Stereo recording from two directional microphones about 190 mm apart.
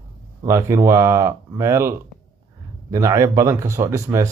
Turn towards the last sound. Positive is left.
turn(degrees=-15)  # may be behind; listen again after turning